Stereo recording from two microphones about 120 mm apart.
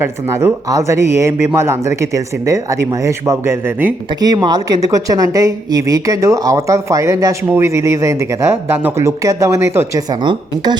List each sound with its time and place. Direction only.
0.0 s speech: 20° right (ahead or behind)
4.4 s speech: 35° right (ahead or behind)
10.2 s a woman's voice: 40° right (ahead or behind)